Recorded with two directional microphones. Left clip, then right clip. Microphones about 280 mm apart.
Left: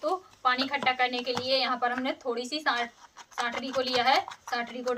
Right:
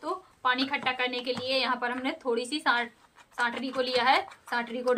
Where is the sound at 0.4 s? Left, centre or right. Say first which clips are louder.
Left 1 dB; centre.